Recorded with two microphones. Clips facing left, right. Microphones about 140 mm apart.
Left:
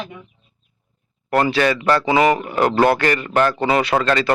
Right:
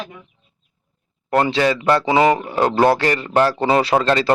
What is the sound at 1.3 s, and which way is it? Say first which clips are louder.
A man's voice: even; 25° right (ahead or behind).